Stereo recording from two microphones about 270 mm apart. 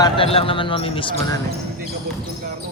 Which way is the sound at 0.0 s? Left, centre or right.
Left.